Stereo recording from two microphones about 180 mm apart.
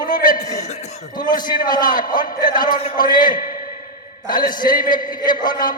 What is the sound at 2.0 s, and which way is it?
Speech, 50° left (ahead or behind).